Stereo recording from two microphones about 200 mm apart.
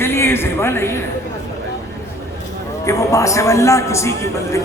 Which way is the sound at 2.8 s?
15° left (ahead or behind).